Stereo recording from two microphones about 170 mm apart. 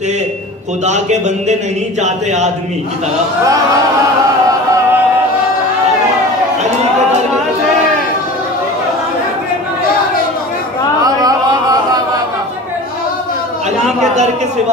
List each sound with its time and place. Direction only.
0.8 s speech: 45° right (ahead or behind)
4.5 s music: 15° right (ahead or behind)
11.0 s a sound: 20° right (ahead or behind)
13.8 s a man's voice: 40° right (ahead or behind)